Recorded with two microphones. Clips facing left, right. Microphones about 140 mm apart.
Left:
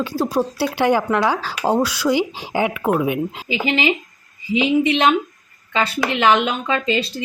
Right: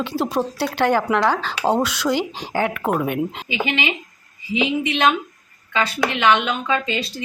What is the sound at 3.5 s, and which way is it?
Speech, 30° left (ahead or behind).